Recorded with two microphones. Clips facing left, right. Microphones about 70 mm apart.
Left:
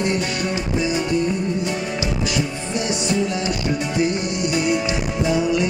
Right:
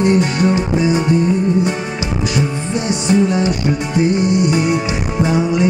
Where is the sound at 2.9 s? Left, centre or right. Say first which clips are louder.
Right 8 dB; right.